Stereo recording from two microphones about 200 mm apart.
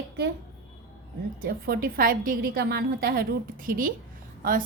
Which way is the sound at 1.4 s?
50° right (ahead or behind).